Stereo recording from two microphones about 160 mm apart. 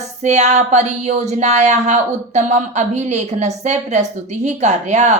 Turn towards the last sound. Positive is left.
turn(degrees=-45)  # may be behind; listen again after turning